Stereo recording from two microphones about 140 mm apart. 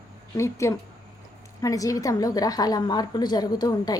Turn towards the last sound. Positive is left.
turn(degrees=30)  # may be behind; listen again after turning